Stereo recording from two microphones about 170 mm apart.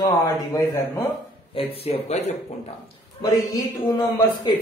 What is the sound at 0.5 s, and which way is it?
Speech, 20° left (ahead or behind).